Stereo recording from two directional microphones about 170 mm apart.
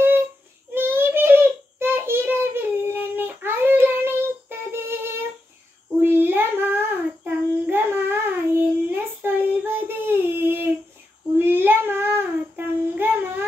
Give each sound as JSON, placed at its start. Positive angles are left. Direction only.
{"t": 0.7, "sound": "child singing", "side_deg": -10}